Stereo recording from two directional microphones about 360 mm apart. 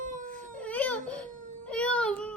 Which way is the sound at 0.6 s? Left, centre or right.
Centre.